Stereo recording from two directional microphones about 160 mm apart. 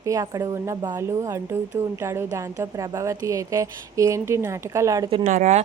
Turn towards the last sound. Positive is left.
turn(degrees=-55)  # may be behind; listen again after turning